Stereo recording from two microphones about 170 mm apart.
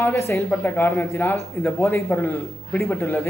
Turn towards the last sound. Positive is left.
turn(degrees=15)  # may be behind; listen again after turning